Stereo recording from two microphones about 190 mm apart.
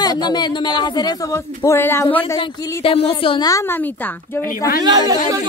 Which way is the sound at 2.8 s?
30° left (ahead or behind).